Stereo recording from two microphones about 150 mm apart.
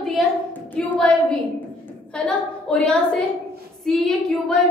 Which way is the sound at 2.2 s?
5° left (ahead or behind).